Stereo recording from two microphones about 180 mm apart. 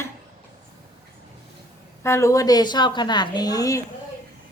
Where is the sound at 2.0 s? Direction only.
15° left (ahead or behind).